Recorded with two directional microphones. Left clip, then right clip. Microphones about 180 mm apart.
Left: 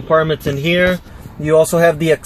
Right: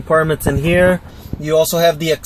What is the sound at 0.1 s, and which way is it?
Speech, centre (ahead or behind).